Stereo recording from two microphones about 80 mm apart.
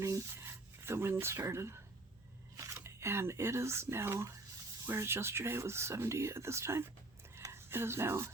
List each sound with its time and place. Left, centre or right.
0.0 s speech: right
2.8 s speech: right
7.3 s a sound: right